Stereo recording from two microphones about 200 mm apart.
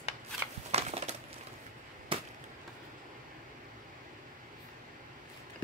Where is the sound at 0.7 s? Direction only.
30° right (ahead or behind).